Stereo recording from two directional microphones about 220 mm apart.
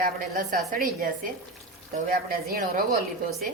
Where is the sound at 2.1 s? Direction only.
40° right (ahead or behind).